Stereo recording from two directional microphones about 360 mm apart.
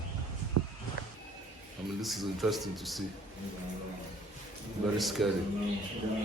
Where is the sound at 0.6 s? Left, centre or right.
Right.